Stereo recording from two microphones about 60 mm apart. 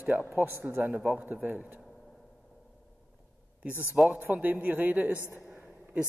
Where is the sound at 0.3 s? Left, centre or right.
Right.